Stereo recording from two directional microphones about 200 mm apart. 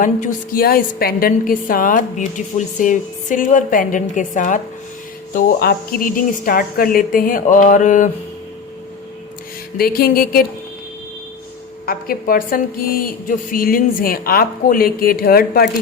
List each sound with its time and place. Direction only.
0.0 s a woman's voice: 40° left (ahead or behind)
9.7 s a woman's voice: 50° left (ahead or behind)
11.9 s a woman's voice: 45° left (ahead or behind)